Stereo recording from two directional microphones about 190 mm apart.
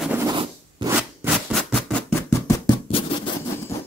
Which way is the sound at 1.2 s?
Centre (ahead or behind).